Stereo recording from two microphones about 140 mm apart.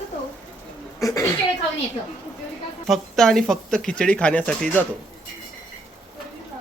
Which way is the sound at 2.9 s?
Centre (ahead or behind).